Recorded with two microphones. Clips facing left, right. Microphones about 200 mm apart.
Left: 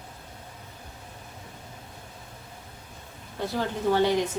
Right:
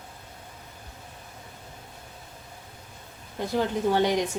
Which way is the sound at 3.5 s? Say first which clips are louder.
Right 1 dB; 15° right (ahead or behind).